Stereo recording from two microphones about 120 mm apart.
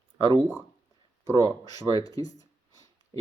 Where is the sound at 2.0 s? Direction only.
30° left (ahead or behind).